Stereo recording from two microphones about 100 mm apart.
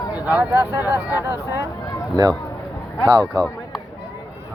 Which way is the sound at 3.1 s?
45° right (ahead or behind).